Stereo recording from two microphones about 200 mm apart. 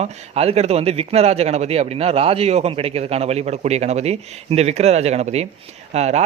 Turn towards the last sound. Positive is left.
turn(degrees=-35)  # may be behind; listen again after turning